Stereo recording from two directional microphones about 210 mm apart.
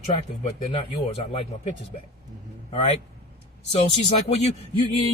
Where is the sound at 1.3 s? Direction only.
30° left (ahead or behind).